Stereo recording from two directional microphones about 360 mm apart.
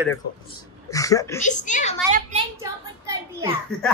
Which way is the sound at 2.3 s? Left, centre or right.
Centre.